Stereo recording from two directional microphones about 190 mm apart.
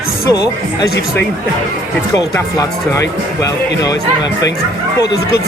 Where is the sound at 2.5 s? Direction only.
20° left (ahead or behind).